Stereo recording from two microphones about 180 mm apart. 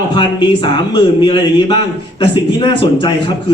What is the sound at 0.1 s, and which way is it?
Speech, 25° left (ahead or behind).